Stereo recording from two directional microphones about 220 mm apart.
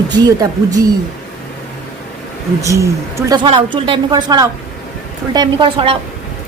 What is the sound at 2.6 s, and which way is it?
A woman's voice, 15° right (ahead or behind).